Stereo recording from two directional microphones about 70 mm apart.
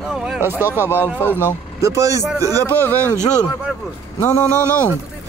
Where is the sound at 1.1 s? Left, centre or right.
Left.